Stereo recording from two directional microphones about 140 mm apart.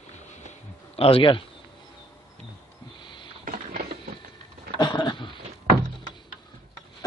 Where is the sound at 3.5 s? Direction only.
90° right.